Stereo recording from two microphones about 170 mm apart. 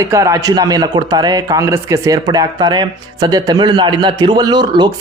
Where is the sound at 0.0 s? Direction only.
15° right (ahead or behind).